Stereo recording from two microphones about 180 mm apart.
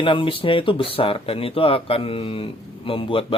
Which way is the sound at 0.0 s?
30° left (ahead or behind).